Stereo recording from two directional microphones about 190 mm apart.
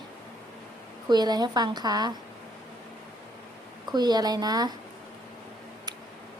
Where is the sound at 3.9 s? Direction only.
20° right (ahead or behind).